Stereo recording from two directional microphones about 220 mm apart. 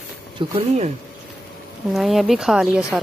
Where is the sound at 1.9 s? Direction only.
Centre (ahead or behind).